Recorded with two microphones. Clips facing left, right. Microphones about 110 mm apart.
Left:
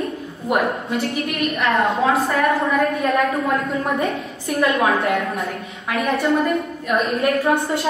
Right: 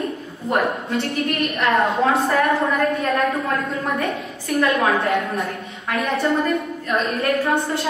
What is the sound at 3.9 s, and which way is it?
Speech, 20° left (ahead or behind).